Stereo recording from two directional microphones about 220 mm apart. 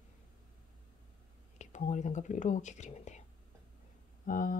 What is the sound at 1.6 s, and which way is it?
Speech, 30° left (ahead or behind).